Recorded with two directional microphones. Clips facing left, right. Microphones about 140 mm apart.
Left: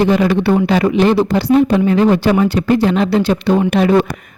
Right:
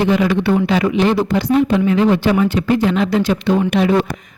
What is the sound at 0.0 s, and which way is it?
Speech, 40° left (ahead or behind).